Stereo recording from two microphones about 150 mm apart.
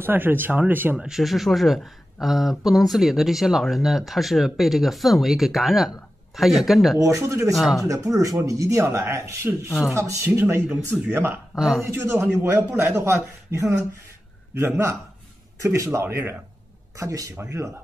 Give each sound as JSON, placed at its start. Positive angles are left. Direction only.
{"t": 0.0, "sound": "speech", "side_deg": -15}
{"t": 0.9, "sound": "speech", "side_deg": 0}
{"t": 7.0, "sound": "speech", "side_deg": -20}
{"t": 7.5, "sound": "speech", "side_deg": 0}
{"t": 7.8, "sound": "speech", "side_deg": -20}
{"t": 15.6, "sound": "speech", "side_deg": -20}